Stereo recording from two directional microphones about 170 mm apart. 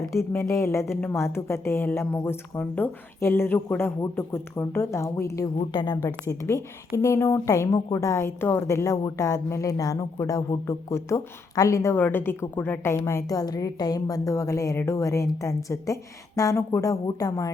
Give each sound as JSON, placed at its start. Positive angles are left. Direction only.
{"t": 0.3, "sound": "a woman's voice", "side_deg": 15}